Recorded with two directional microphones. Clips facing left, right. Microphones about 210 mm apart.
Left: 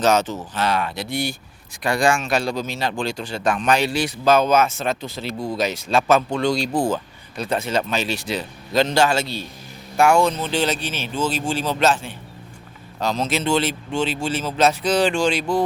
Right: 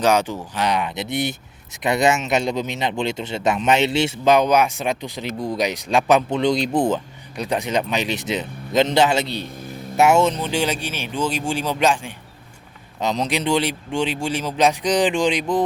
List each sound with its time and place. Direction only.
0.0 s speech: 10° right (ahead or behind)